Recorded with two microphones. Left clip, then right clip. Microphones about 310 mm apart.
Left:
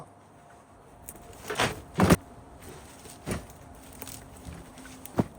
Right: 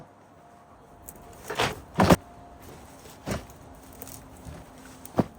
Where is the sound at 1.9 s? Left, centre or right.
Right.